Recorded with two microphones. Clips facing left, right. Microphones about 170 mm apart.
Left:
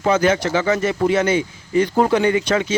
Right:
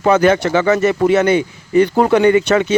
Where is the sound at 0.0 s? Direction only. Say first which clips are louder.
Right 4 dB; 60° right (ahead or behind).